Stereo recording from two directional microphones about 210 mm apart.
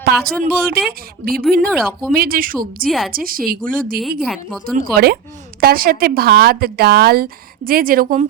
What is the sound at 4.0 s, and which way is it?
Speech, centre (ahead or behind).